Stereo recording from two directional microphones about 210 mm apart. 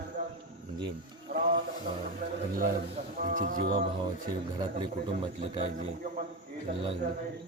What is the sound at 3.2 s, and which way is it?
Speech, 40° right (ahead or behind).